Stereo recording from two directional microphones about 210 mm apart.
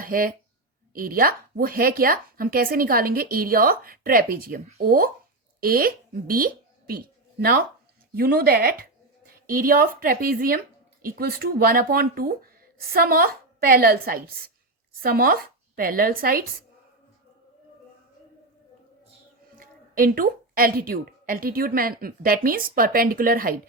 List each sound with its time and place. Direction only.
0.0 s speech: 45° right (ahead or behind)
19.5 s speech: 40° right (ahead or behind)